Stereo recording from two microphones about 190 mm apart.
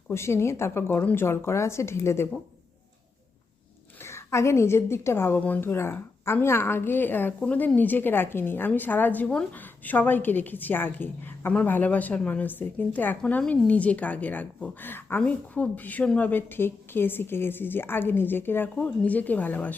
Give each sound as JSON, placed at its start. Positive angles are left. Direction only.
{"t": 0.1, "sound": "a woman's voice", "side_deg": 15}
{"t": 4.0, "sound": "a woman's voice", "side_deg": 15}